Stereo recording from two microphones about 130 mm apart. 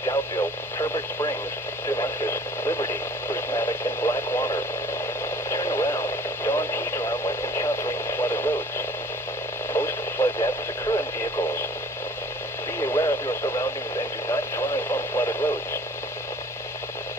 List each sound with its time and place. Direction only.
0.0 s radio: 35° left (ahead or behind); by 8.5 s 20° left (ahead or behind)
9.7 s radio: 20° left (ahead or behind)
13.0 s radio: 30° left (ahead or behind)
14.3 s radio: 20° left (ahead or behind)